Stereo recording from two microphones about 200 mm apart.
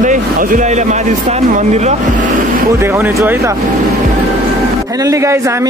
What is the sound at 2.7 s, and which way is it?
Speech, 10° right (ahead or behind).